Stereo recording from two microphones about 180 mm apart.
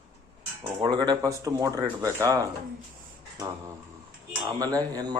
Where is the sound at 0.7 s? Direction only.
25° right (ahead or behind).